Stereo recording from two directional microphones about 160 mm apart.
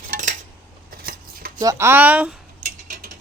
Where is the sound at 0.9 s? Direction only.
65° right (ahead or behind).